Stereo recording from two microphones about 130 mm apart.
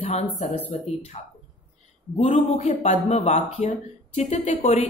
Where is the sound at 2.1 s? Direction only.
65° left (ahead or behind).